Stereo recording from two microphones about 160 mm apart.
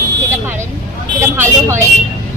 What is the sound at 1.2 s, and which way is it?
Speech, 15° right (ahead or behind).